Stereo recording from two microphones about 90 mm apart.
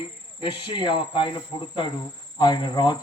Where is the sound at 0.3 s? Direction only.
65° left (ahead or behind).